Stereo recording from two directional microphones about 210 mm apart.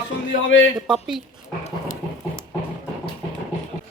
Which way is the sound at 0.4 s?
65° left (ahead or behind).